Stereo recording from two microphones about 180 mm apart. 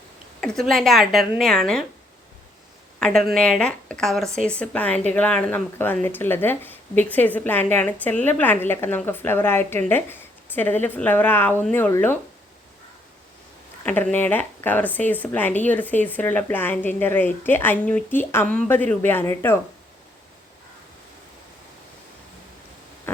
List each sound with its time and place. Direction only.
0.4 s a woman's voice: centre (ahead or behind)
3.0 s a woman's voice: 5° left (ahead or behind)
13.8 s speech: 10° left (ahead or behind)
23.1 s a sound: 10° left (ahead or behind)